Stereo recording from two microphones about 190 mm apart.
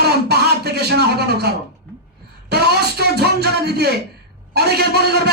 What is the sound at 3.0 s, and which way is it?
A man's voice, 60° right (ahead or behind).